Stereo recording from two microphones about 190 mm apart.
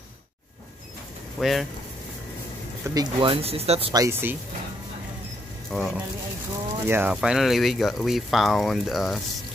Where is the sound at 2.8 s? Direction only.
20° right (ahead or behind).